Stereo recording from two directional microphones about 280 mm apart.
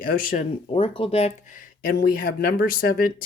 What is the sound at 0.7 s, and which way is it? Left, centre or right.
Speech, centre.